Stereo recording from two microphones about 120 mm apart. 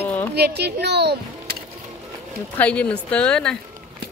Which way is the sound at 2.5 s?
10° left (ahead or behind).